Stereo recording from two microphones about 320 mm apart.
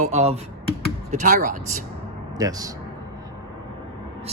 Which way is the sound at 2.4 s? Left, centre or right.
Centre.